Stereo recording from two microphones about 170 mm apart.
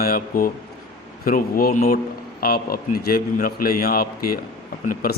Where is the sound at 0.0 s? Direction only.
60° left (ahead or behind).